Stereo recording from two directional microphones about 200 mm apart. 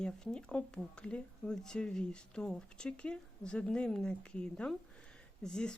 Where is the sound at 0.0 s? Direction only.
5° left (ahead or behind).